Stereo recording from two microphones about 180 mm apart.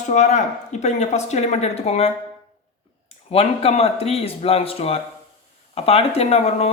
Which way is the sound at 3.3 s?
35° left (ahead or behind).